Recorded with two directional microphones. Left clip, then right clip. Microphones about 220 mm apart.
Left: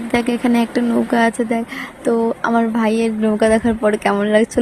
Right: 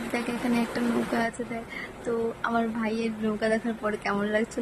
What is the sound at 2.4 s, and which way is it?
A woman's voice, 30° left (ahead or behind).